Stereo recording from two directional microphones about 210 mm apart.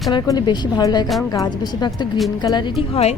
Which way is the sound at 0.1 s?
20° left (ahead or behind).